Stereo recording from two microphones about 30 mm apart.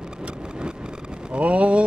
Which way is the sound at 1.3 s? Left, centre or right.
Right.